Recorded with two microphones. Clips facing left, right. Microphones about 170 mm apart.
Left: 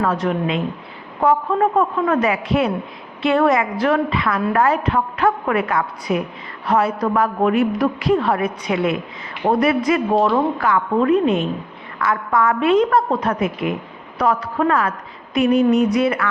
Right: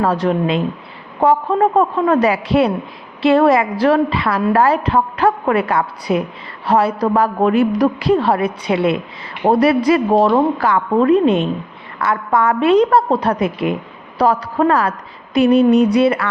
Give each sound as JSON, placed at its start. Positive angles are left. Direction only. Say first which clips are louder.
{"t": 0.0, "sound": "a woman's voice", "louder": "right 3 dB", "side_deg": -35}